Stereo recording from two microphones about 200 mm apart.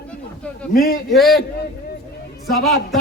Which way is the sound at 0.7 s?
45° left (ahead or behind).